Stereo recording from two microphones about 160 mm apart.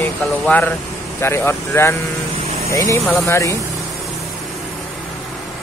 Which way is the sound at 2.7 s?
20° left (ahead or behind).